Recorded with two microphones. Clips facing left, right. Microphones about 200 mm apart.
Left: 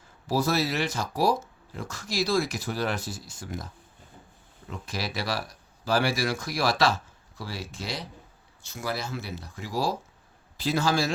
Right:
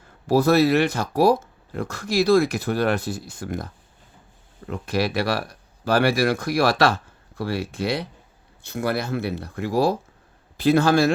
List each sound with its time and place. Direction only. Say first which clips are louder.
0.3 s speech: right 9 dB; 60° right (ahead or behind)
4.7 s speech: right 10 dB; 60° right (ahead or behind)